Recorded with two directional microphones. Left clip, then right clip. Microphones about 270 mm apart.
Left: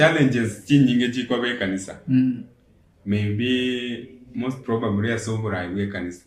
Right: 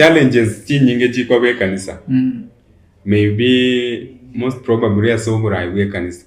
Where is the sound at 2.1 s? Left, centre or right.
Left.